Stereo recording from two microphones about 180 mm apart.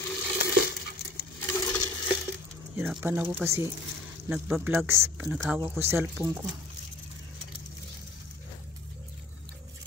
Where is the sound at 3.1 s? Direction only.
15° right (ahead or behind).